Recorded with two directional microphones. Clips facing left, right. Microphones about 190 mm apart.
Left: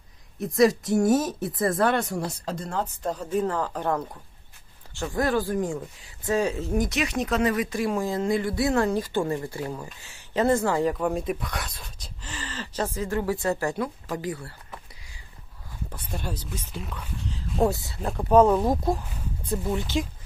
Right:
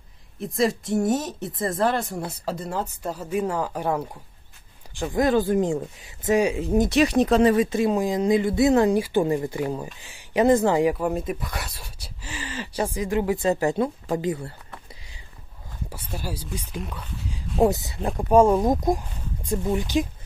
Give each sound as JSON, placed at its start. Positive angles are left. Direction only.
{"t": 0.4, "sound": "speech", "side_deg": 0}
{"t": 1.4, "sound": "speech", "side_deg": -25}
{"t": 2.4, "sound": "speech", "side_deg": -5}
{"t": 15.9, "sound": "speech", "side_deg": -10}